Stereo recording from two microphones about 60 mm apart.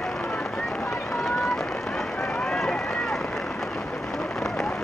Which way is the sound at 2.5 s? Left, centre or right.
Centre.